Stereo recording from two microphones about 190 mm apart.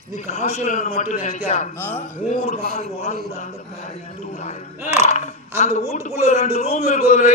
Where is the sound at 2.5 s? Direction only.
50° right (ahead or behind).